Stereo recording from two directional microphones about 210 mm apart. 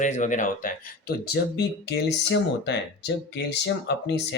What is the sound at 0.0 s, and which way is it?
Speech, 35° left (ahead or behind).